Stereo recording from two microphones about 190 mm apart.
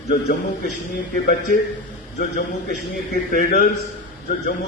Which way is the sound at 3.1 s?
45° left (ahead or behind).